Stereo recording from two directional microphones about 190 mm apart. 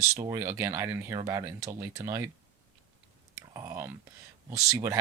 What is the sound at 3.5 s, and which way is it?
Speech, 20° right (ahead or behind).